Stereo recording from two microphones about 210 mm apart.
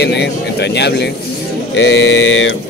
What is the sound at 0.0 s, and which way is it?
A man's voice, 55° left (ahead or behind).